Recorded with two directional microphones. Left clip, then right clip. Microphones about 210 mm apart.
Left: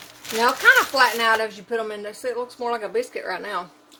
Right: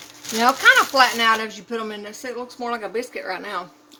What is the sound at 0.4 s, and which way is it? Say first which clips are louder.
Speech: right 1 dB; 30° right (ahead or behind).